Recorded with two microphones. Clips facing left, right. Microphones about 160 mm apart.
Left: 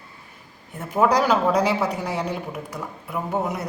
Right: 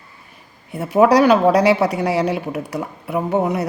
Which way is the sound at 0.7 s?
75° right (ahead or behind).